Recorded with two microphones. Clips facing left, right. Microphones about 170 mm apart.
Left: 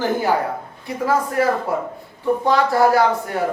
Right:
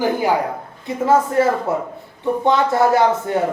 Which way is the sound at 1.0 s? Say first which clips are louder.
Right 3 dB; 25° right (ahead or behind).